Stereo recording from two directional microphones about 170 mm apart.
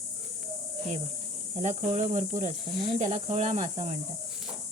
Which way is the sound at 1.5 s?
45° right (ahead or behind).